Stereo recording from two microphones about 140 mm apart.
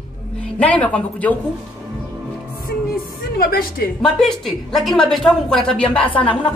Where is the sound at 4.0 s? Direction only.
5° left (ahead or behind).